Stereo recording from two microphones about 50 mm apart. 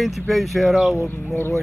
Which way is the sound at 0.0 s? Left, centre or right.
Centre.